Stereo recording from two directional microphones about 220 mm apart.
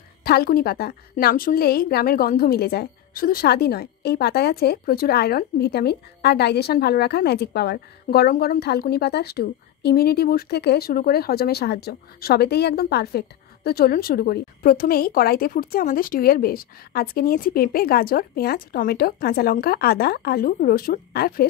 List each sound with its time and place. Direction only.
0.2 s a woman's voice: 45° left (ahead or behind)